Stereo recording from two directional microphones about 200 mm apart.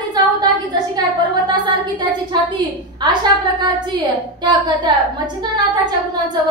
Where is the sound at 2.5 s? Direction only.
20° right (ahead or behind).